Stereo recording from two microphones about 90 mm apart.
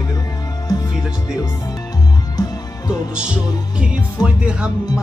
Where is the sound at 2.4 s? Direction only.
45° left (ahead or behind).